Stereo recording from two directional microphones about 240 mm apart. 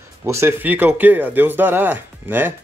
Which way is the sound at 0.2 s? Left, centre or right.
Centre.